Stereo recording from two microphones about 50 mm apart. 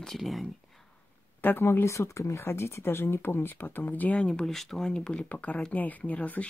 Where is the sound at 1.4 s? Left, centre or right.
Left.